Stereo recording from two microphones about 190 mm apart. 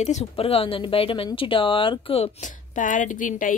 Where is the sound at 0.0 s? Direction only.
35° left (ahead or behind).